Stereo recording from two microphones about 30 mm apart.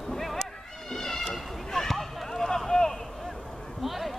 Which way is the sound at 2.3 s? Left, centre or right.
Centre.